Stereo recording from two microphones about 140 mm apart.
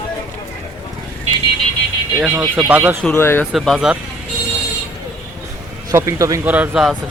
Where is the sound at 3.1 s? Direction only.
15° left (ahead or behind).